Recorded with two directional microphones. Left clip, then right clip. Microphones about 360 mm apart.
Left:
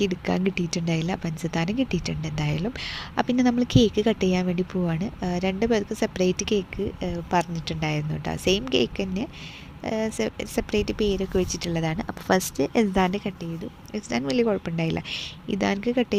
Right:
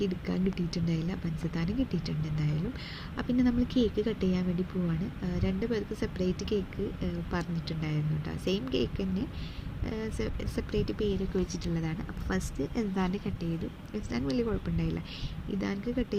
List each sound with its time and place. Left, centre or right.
0.0 s speech: left